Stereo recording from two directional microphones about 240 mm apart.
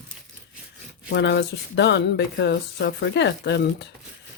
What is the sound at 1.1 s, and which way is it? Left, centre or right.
Speech, left.